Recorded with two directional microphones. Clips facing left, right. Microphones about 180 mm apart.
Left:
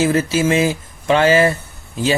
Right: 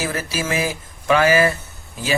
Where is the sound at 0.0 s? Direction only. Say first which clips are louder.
Left 9 dB; 25° left (ahead or behind).